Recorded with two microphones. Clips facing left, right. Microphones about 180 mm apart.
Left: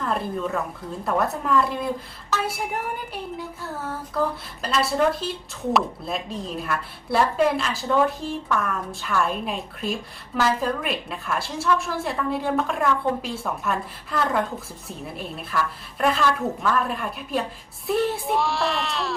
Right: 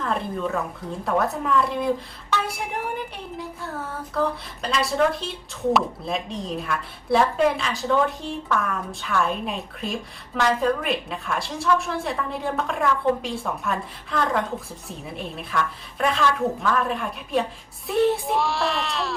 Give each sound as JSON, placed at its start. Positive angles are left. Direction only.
{"t": 0.0, "sound": "a woman's voice", "side_deg": 0}
{"t": 4.1, "sound": "speech", "side_deg": 0}